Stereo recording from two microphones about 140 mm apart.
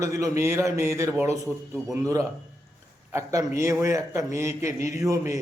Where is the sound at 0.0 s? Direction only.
20° right (ahead or behind).